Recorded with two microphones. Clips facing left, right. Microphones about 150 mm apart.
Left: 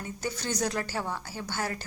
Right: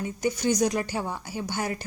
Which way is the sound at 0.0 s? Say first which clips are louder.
Right 8 dB; 15° right (ahead or behind).